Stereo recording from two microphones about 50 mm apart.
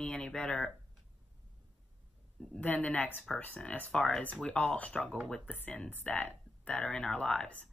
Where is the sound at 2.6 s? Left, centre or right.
Left.